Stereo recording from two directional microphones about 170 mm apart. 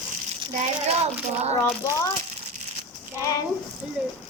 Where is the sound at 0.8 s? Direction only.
40° right (ahead or behind).